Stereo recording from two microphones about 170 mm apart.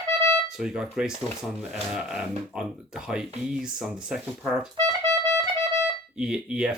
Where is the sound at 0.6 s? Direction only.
5° right (ahead or behind).